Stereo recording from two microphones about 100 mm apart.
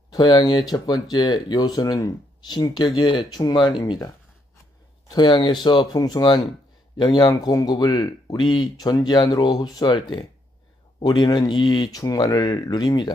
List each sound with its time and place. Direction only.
0.1 s speech: 45° left (ahead or behind)
5.1 s speech: 50° left (ahead or behind)